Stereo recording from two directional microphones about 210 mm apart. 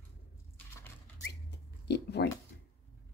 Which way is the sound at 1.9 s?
50° left (ahead or behind).